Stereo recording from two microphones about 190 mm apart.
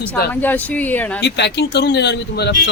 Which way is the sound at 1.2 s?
65° left (ahead or behind).